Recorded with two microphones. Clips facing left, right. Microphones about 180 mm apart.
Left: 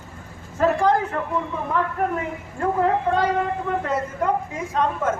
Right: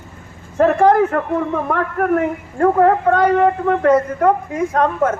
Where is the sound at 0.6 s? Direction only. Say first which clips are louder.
Right 7 dB; 55° right (ahead or behind).